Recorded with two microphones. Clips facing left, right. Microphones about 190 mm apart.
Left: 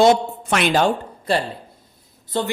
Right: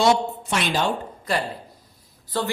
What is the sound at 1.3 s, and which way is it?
A woman's voice, 30° left (ahead or behind).